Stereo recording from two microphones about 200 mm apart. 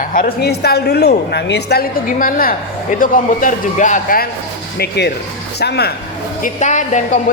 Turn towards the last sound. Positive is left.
turn(degrees=35)  # may be behind; listen again after turning